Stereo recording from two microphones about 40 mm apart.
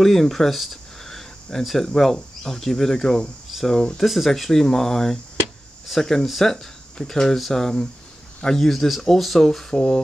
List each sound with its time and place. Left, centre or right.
0.0 s speech: centre
4.3 s speech: centre
7.6 s speech: centre
8.5 s speech: centre